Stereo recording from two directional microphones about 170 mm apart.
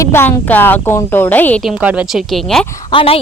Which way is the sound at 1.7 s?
5° right (ahead or behind).